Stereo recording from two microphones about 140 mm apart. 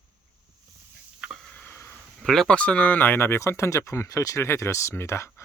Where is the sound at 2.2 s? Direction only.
Centre (ahead or behind).